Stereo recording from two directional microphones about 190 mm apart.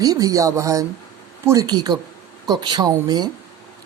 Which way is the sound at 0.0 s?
20° right (ahead or behind).